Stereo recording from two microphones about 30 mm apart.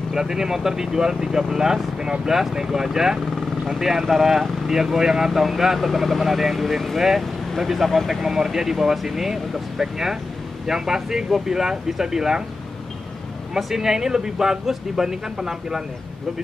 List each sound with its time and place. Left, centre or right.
0.1 s speech: centre
13.6 s speech: centre